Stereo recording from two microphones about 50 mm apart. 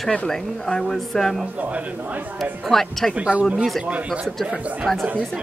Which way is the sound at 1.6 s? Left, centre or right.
Right.